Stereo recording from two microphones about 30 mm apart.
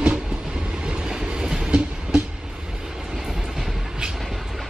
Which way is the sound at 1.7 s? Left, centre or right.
Right.